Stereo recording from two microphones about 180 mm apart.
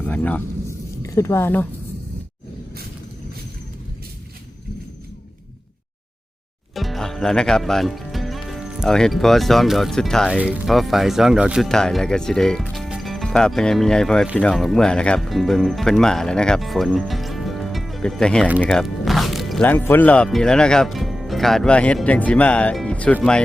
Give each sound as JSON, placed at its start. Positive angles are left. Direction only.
{"t": 0.0, "sound": "speech", "side_deg": 10}
{"t": 6.7, "sound": "speech", "side_deg": 0}